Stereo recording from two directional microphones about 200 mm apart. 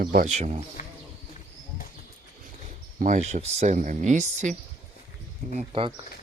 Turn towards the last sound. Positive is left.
turn(degrees=-25)  # may be behind; listen again after turning